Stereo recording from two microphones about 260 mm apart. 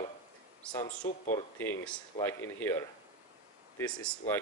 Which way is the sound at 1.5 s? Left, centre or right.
Centre.